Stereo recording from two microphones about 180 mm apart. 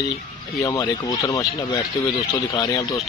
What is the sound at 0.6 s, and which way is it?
Speech, 20° left (ahead or behind).